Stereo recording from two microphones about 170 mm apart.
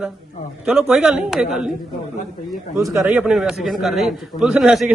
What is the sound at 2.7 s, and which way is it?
A man's voice, 15° right (ahead or behind).